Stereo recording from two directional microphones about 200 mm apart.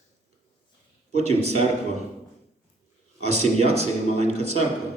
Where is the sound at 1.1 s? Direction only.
35° right (ahead or behind).